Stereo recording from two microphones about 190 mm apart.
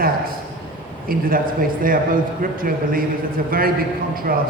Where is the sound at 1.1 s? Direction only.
50° right (ahead or behind).